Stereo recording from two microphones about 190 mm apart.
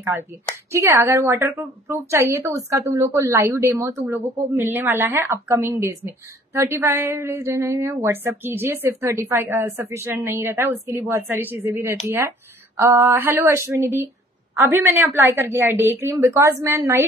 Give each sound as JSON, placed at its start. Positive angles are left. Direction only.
{"t": 0.1, "sound": "a woman's voice", "side_deg": -10}